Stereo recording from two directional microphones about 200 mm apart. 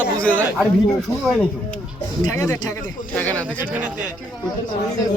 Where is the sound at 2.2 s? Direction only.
15° left (ahead or behind).